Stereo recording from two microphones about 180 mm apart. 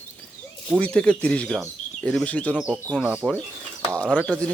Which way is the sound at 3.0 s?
5° right (ahead or behind).